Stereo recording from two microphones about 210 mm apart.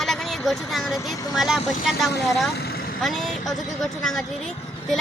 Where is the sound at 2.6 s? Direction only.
50° left (ahead or behind).